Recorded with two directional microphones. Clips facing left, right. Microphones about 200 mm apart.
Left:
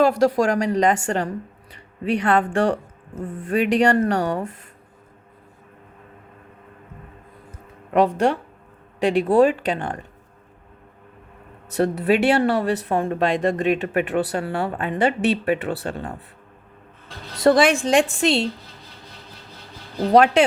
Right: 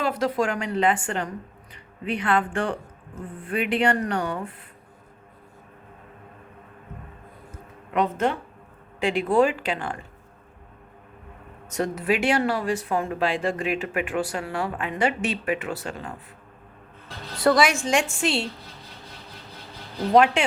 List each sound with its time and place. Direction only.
0.0 s speech: 40° left (ahead or behind)
9.0 s speech: 35° left (ahead or behind)
11.7 s speech: 35° left (ahead or behind)
17.5 s speech: 30° left (ahead or behind)
20.1 s speech: 40° left (ahead or behind)